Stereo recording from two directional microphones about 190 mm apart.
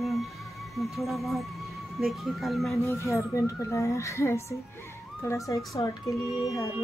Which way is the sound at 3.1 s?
15° left (ahead or behind).